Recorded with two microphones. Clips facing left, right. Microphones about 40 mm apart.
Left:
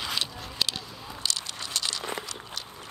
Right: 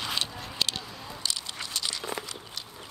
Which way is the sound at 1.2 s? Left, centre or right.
Left.